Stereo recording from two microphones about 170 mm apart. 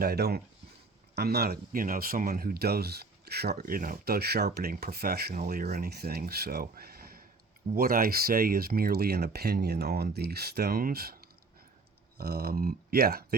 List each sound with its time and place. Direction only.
0.0 s speech: 65° right (ahead or behind)
3.6 s speech: 55° right (ahead or behind)